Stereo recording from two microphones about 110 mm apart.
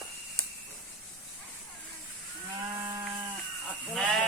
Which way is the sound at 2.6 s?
30° right (ahead or behind).